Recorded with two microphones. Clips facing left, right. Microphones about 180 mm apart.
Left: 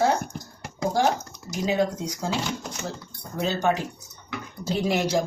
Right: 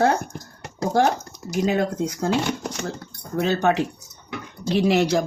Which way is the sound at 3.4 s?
60° right (ahead or behind).